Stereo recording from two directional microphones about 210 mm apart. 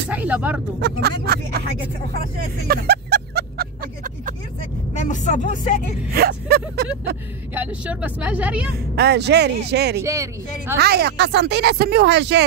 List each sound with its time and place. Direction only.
0.1 s speech: 5° right (ahead or behind)
0.7 s speech: 50° right (ahead or behind)
2.7 s music: 50° right (ahead or behind)
5.1 s speech: 35° left (ahead or behind)
6.1 s speech: 50° right (ahead or behind)
7.5 s speech: 5° right (ahead or behind)
8.7 s speech: 50° right (ahead or behind)
10.0 s speech: 15° right (ahead or behind)
10.8 s speech: 50° right (ahead or behind)